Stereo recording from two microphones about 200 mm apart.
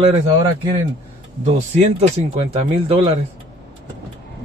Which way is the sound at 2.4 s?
30° right (ahead or behind).